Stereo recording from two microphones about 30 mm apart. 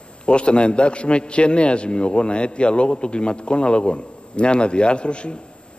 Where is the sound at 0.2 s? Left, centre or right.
Left.